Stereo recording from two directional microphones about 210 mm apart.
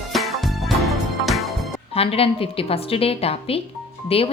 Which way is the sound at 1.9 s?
25° left (ahead or behind).